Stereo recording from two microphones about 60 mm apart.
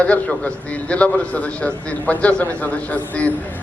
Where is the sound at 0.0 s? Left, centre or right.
Left.